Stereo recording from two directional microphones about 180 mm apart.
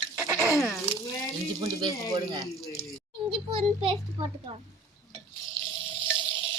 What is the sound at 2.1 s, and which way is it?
Speech, 25° right (ahead or behind).